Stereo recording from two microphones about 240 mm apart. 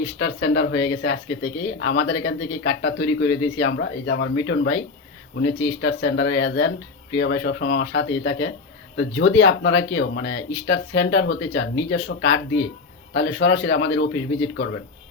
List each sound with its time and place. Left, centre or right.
0.0 s speech: left